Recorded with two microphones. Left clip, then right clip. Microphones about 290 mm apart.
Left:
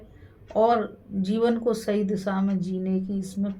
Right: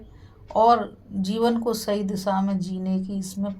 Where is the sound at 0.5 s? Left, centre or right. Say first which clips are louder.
Right 3 dB; right.